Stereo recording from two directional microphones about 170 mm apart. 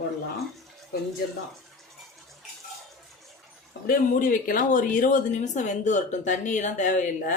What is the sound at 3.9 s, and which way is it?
A woman's voice, 55° left (ahead or behind).